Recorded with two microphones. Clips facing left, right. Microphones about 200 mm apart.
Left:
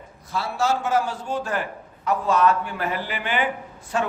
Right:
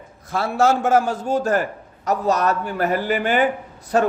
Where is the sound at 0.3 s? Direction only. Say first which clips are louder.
Right 6 dB; 50° right (ahead or behind).